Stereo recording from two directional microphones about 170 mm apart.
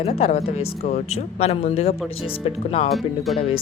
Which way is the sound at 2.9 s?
Centre (ahead or behind).